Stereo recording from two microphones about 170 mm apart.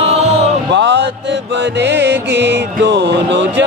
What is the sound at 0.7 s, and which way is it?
Music, 90° right.